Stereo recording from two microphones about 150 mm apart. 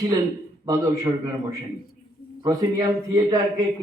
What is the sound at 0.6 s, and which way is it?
Speech, 25° right (ahead or behind).